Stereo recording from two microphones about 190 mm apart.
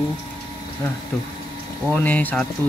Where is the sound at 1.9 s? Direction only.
10° left (ahead or behind).